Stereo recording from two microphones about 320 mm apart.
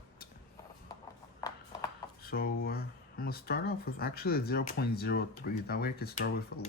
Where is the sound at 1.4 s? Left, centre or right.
Centre.